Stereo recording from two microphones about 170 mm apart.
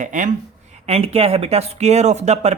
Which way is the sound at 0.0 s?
50° right (ahead or behind).